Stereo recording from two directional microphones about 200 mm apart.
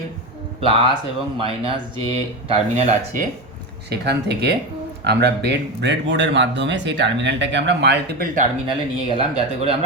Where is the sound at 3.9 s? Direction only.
55° right (ahead or behind).